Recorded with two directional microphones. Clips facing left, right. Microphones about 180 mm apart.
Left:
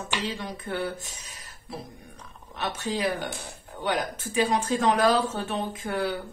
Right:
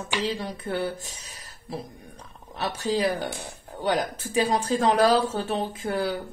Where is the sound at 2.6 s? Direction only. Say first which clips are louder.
Right 4 dB; 35° right (ahead or behind).